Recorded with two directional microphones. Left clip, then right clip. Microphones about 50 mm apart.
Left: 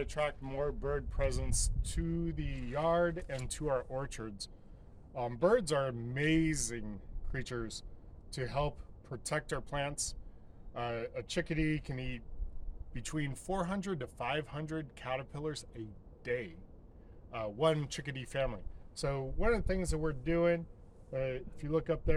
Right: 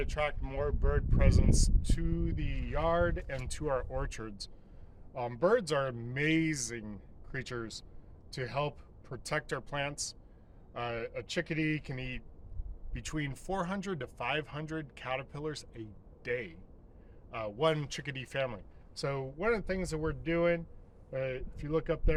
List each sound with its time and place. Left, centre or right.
0.0 s speech: centre